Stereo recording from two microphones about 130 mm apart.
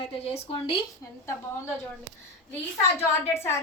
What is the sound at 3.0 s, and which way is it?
Speech, 20° left (ahead or behind).